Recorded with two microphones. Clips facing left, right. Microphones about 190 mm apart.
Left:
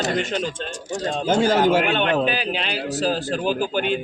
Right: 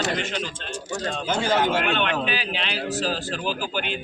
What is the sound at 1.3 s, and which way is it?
A man's voice, 40° left (ahead or behind).